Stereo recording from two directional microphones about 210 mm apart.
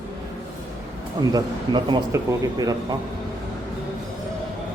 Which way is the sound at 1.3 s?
20° right (ahead or behind).